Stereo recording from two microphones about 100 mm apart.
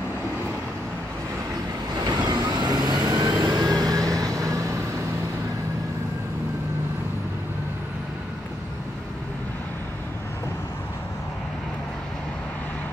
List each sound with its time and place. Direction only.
2.0 s vehicle: 40° right (ahead or behind)